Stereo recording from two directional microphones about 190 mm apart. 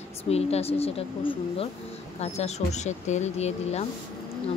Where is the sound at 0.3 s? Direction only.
35° left (ahead or behind).